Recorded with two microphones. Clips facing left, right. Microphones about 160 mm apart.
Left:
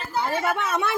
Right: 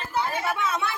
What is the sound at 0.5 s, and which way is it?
Speech, 55° left (ahead or behind).